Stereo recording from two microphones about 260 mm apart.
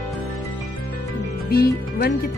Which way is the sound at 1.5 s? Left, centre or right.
Left.